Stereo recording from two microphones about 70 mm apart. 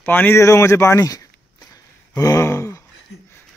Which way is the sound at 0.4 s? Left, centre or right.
Left.